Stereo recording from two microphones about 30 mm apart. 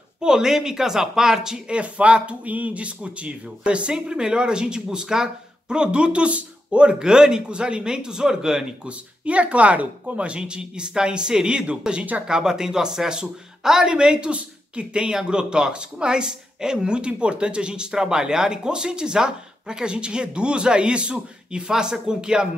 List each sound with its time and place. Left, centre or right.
0.2 s a woman's voice: centre
1.7 s speech: right
2.4 s speech: right
3.0 s speech: right
3.9 s speech: right
5.8 s speech: right
7.0 s speech: right
8.8 s speech: right
10.4 s speech: right
12.3 s speech: right